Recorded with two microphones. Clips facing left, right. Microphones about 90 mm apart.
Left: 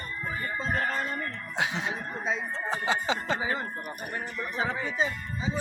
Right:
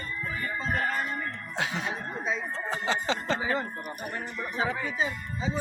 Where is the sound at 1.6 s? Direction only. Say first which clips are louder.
Left 1 dB; 20° left (ahead or behind).